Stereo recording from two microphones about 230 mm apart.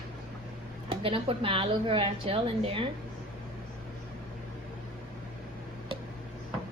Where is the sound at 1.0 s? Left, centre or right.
Right.